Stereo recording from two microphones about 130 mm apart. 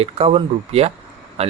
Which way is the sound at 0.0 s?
50° right (ahead or behind).